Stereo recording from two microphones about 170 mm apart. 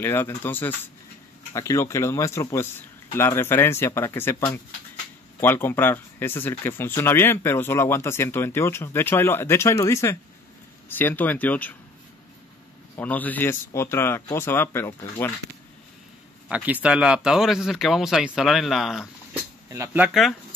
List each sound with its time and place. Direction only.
0.0 s speech: 15° left (ahead or behind)
12.9 s speech: 10° left (ahead or behind)
16.4 s speech: 10° right (ahead or behind)
19.7 s speech: 15° right (ahead or behind)